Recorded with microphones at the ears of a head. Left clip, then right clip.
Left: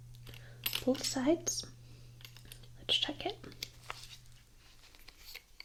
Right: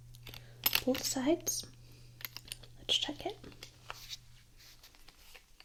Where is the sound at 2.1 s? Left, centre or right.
Right.